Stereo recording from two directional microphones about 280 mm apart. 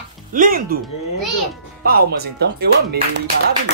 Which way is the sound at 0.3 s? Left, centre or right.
Right.